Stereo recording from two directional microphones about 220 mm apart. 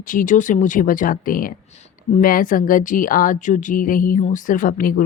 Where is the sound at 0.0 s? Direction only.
35° left (ahead or behind).